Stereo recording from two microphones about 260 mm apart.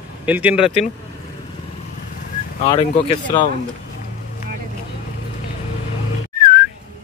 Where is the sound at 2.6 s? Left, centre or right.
Left.